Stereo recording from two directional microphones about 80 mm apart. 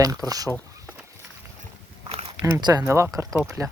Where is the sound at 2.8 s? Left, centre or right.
Right.